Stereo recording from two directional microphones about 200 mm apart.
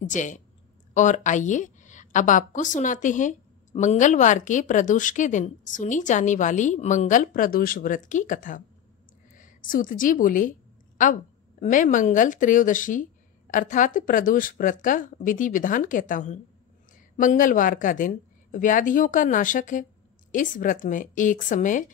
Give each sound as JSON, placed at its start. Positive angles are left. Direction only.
{"t": 0.1, "sound": "a woman's voice", "side_deg": 40}
{"t": 11.6, "sound": "a woman's voice", "side_deg": 40}